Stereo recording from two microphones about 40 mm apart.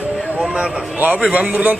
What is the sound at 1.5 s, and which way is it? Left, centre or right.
Speech, right.